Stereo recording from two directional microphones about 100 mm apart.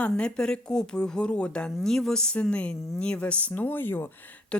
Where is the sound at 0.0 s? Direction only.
10° left (ahead or behind).